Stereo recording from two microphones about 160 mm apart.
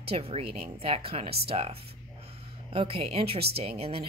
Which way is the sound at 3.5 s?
40° right (ahead or behind).